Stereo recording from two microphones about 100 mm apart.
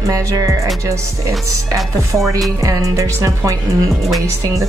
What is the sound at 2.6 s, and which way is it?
Speech, 35° right (ahead or behind).